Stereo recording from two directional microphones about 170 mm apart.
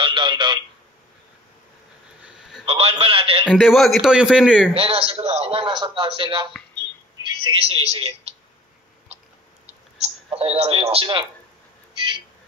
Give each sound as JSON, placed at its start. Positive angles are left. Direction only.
{"t": 0.0, "sound": "speech", "side_deg": -30}
{"t": 2.2, "sound": "a sound", "side_deg": 0}
{"t": 2.6, "sound": "a man's voice", "side_deg": -35}
{"t": 3.5, "sound": "a man's voice", "side_deg": 0}
{"t": 4.7, "sound": "a man's voice", "side_deg": -35}
{"t": 10.0, "sound": "a man's voice", "side_deg": -35}